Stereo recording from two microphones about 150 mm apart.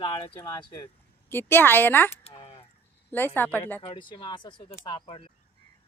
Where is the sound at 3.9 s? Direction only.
35° left (ahead or behind).